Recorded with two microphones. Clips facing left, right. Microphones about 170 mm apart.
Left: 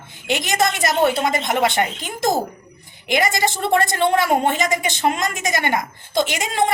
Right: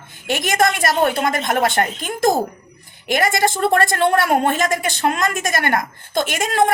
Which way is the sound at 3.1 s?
55° right (ahead or behind).